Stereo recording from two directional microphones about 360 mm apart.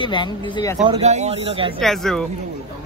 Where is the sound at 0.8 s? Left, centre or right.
Centre.